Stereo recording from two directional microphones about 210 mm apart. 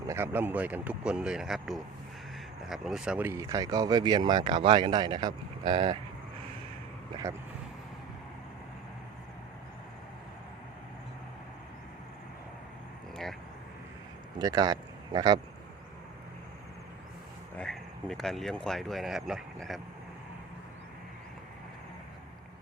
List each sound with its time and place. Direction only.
0.0 s speech: 15° right (ahead or behind)
14.3 s speech: 20° right (ahead or behind)
17.6 s speech: centre (ahead or behind)